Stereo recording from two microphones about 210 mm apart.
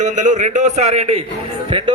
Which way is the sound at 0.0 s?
35° right (ahead or behind).